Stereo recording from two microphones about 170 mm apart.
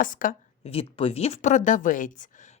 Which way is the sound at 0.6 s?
35° left (ahead or behind).